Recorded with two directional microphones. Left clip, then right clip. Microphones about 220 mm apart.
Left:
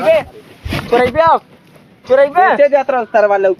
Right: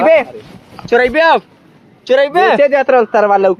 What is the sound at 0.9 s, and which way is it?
Speech, 55° right (ahead or behind).